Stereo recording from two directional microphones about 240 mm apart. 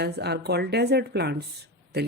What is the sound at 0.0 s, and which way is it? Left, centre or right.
A woman's voice, right.